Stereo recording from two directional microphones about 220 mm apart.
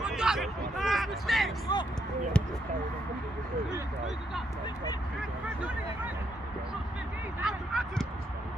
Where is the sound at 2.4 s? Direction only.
5° left (ahead or behind).